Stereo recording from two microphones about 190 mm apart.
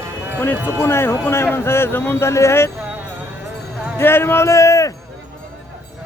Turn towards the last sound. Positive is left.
turn(degrees=15)  # may be behind; listen again after turning